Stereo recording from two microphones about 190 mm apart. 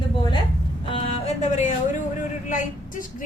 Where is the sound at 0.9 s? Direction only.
30° left (ahead or behind).